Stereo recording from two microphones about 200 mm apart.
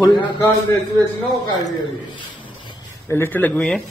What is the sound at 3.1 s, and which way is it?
Speech, 10° left (ahead or behind).